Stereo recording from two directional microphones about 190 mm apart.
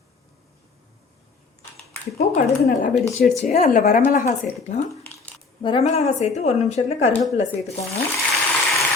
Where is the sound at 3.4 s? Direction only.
45° left (ahead or behind).